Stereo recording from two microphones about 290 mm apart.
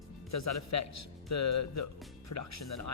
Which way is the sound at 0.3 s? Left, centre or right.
Left.